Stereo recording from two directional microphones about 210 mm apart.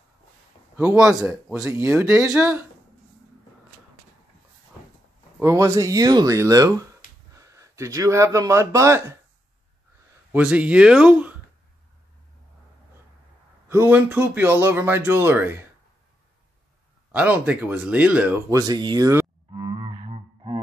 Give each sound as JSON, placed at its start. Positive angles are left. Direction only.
{"t": 0.7, "sound": "speech", "side_deg": -5}
{"t": 5.4, "sound": "speech", "side_deg": -15}
{"t": 10.3, "sound": "speech", "side_deg": -5}
{"t": 13.7, "sound": "speech", "side_deg": -10}
{"t": 17.1, "sound": "a sound", "side_deg": -5}